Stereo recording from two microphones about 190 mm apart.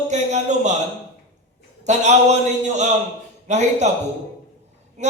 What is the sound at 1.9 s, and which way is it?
Speech, 35° right (ahead or behind).